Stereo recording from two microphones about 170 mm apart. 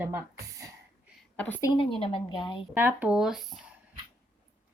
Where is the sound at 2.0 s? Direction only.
30° left (ahead or behind).